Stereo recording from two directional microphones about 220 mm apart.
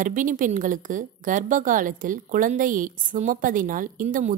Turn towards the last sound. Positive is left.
turn(degrees=-35)  # may be behind; listen again after turning